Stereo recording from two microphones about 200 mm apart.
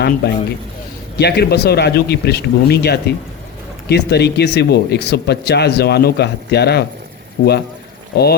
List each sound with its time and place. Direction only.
1.2 s a man's voice: 55° left (ahead or behind)